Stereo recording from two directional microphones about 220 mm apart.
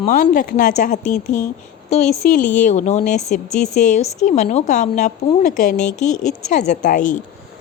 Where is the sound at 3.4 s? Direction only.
Centre (ahead or behind).